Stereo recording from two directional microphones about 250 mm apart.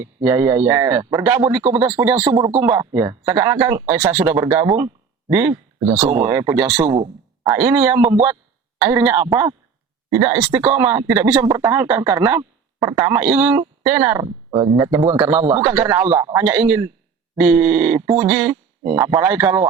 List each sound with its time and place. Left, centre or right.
0.0 s speech: centre